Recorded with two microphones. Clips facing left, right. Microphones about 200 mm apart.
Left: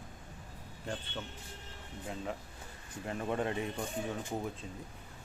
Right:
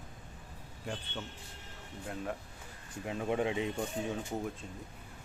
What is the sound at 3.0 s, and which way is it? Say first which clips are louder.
Speech: right 2 dB; 10° right (ahead or behind).